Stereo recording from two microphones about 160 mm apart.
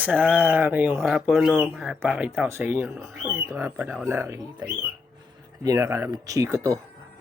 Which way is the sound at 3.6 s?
15° right (ahead or behind).